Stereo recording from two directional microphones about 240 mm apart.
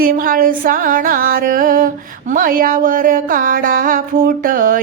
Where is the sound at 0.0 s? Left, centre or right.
Right.